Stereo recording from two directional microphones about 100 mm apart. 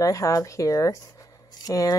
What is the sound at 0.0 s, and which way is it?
Speech, 35° left (ahead or behind).